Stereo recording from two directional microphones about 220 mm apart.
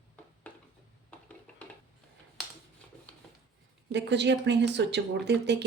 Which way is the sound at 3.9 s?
50° right (ahead or behind).